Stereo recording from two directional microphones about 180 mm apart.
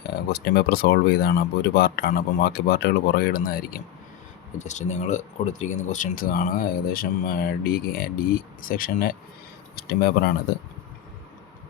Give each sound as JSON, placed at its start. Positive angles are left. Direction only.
{"t": 0.1, "sound": "speech", "side_deg": 60}
{"t": 4.5, "sound": "speech", "side_deg": 40}